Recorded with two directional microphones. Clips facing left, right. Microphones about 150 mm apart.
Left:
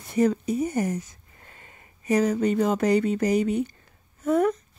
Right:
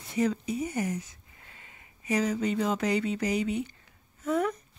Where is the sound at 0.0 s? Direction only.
50° left (ahead or behind).